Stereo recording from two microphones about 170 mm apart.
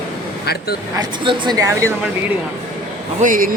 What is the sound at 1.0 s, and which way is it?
Speech, 25° right (ahead or behind).